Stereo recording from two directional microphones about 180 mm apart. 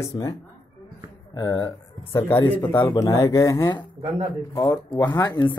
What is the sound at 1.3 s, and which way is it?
Speech, 20° left (ahead or behind).